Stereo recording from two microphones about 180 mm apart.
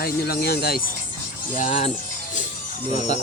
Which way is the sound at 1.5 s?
40° left (ahead or behind).